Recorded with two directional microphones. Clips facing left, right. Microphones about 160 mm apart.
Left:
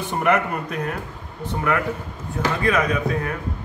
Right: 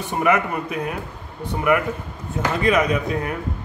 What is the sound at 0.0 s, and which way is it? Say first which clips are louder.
A man's voice: right 1 dB; 5° right (ahead or behind).